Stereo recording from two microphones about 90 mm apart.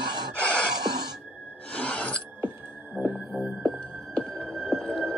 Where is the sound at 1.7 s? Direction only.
15° left (ahead or behind).